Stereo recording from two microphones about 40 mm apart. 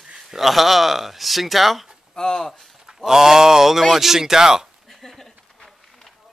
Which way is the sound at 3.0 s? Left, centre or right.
Centre.